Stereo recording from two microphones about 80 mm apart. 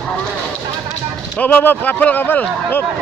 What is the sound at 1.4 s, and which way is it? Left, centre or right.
Speech, left.